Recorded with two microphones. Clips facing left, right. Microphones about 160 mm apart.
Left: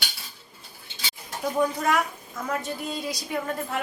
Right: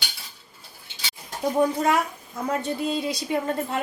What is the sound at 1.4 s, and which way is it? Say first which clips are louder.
A woman's voice: right 3 dB; 25° right (ahead or behind).